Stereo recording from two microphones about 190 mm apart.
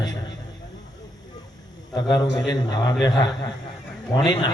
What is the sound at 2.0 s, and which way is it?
A man's voice, 20° left (ahead or behind).